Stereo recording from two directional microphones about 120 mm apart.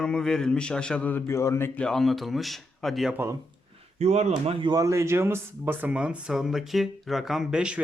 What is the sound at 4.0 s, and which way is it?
Speech, 65° right (ahead or behind).